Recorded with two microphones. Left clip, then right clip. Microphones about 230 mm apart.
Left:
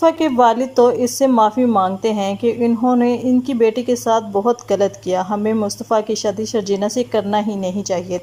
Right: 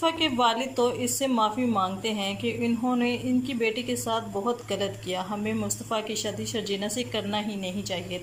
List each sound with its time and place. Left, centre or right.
0.0 s a woman's voice: left